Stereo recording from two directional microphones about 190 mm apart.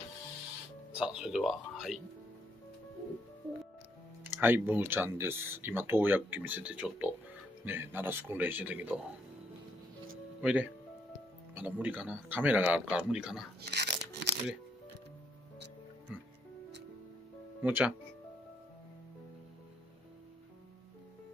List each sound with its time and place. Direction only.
0.9 s speech: 5° right (ahead or behind)
4.4 s speech: 10° right (ahead or behind)
10.4 s speech: 5° right (ahead or behind)
13.7 s a sound: 60° right (ahead or behind)
16.1 s music: 5° right (ahead or behind)
17.6 s speech: 10° right (ahead or behind)